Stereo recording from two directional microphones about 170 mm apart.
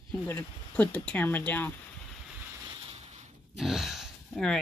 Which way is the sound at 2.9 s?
35° right (ahead or behind).